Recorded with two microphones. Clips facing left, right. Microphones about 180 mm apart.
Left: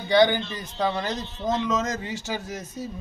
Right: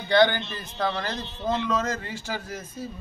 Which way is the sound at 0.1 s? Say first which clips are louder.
Left 1 dB; 15° left (ahead or behind).